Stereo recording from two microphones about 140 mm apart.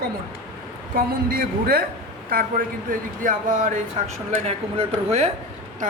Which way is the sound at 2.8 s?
70° right (ahead or behind).